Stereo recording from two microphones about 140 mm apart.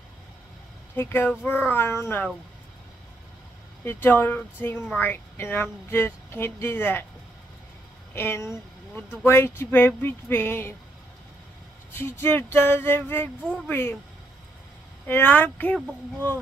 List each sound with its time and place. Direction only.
0.9 s speech: 15° left (ahead or behind)
3.8 s speech: 15° left (ahead or behind)
8.1 s speech: 15° left (ahead or behind)
11.9 s speech: 15° left (ahead or behind)
13.4 s speech: 10° right (ahead or behind)
13.7 s speech: 15° left (ahead or behind)
15.0 s speech: 15° left (ahead or behind)